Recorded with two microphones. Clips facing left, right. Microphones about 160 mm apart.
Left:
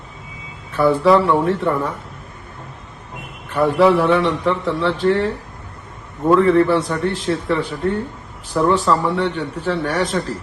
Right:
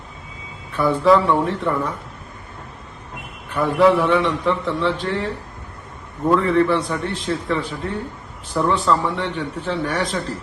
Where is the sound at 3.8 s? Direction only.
Centre (ahead or behind).